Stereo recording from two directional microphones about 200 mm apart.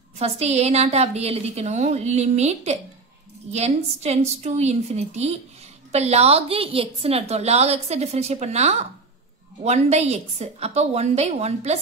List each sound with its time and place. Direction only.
0.2 s a woman's voice: 30° right (ahead or behind)